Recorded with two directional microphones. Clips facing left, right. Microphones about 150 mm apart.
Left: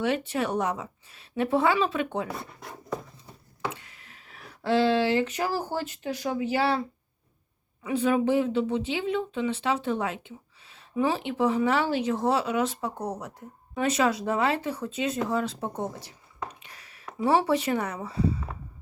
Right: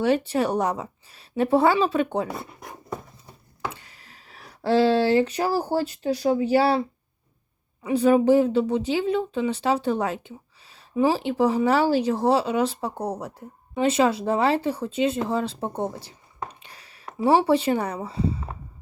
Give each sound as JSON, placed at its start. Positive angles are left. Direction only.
{"t": 0.0, "sound": "speech", "side_deg": -35}
{"t": 2.4, "sound": "speech", "side_deg": -20}
{"t": 3.7, "sound": "speech", "side_deg": -35}
{"t": 7.9, "sound": "speech", "side_deg": -35}